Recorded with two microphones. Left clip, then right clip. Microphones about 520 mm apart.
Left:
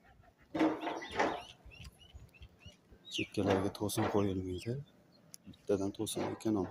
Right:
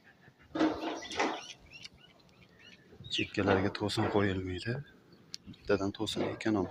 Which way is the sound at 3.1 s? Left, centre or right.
Left.